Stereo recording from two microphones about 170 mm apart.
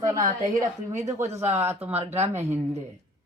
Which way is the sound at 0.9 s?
45° right (ahead or behind).